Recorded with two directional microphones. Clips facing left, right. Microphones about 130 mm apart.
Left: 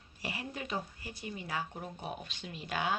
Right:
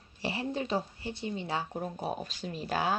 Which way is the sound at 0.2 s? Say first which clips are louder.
Right 7 dB; 30° right (ahead or behind).